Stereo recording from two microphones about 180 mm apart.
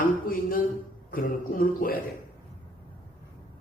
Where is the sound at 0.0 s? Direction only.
50° left (ahead or behind).